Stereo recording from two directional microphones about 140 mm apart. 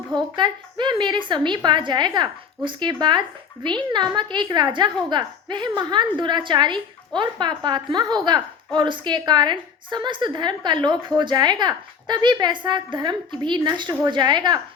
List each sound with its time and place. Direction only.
0.1 s a woman's voice: 35° right (ahead or behind)